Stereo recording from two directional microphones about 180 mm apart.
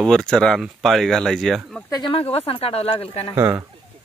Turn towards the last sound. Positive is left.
turn(degrees=-15)  # may be behind; listen again after turning